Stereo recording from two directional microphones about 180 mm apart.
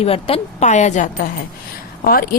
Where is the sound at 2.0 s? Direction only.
55° left (ahead or behind).